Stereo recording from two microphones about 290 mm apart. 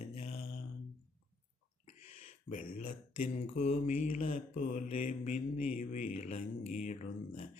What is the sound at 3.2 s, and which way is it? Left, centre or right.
Mantra, left.